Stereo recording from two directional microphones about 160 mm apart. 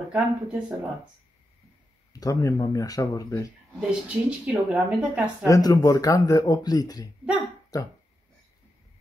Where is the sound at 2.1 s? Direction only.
20° left (ahead or behind).